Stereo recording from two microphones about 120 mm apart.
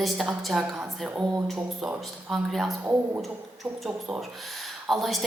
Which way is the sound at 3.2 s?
Centre (ahead or behind).